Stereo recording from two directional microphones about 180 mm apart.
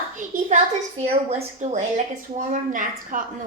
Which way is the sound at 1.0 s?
35° right (ahead or behind).